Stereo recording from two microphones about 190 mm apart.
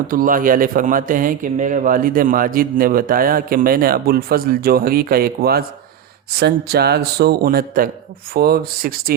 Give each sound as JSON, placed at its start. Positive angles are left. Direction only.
{"t": 0.1, "sound": "a man's voice", "side_deg": -45}